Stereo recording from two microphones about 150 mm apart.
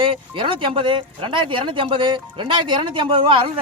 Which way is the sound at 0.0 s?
35° right (ahead or behind).